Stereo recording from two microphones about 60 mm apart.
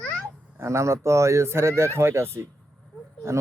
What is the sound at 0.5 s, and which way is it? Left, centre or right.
Speech, right.